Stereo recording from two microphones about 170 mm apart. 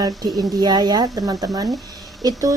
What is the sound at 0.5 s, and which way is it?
Speech, 25° right (ahead or behind).